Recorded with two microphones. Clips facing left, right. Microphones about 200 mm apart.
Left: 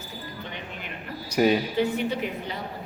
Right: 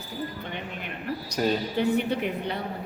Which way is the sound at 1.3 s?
10° left (ahead or behind).